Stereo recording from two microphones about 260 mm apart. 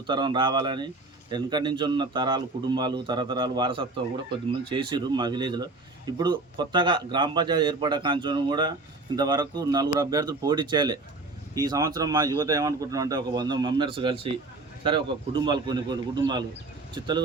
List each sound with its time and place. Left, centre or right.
0.1 s speech: centre